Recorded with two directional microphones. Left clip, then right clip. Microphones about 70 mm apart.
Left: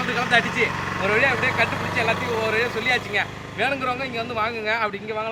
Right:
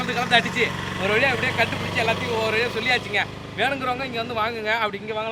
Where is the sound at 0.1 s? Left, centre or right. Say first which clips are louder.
Even; centre.